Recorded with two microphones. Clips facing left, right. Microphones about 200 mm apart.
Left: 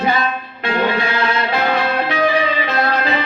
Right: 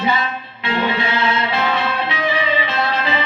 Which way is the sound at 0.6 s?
45° left (ahead or behind).